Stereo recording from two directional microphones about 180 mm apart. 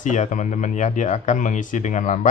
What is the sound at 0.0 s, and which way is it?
A man's voice, 45° left (ahead or behind).